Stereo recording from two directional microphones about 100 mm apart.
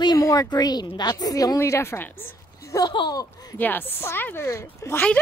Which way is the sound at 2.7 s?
50° left (ahead or behind).